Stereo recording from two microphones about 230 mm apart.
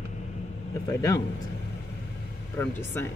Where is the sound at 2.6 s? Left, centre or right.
Centre.